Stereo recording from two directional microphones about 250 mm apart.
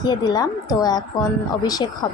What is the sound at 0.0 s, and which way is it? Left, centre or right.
A woman's voice, centre.